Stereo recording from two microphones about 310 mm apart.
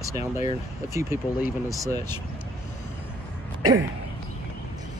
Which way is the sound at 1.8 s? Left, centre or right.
Centre.